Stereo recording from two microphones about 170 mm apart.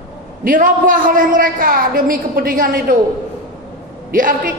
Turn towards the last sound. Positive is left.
turn(degrees=-55)  # may be behind; listen again after turning